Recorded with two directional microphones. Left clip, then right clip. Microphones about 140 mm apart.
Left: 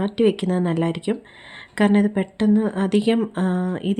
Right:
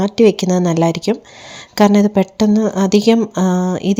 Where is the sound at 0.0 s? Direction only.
40° right (ahead or behind).